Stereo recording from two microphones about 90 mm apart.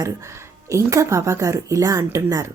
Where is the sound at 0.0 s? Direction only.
35° right (ahead or behind).